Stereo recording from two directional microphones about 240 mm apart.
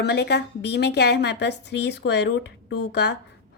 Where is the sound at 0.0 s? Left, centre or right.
Left.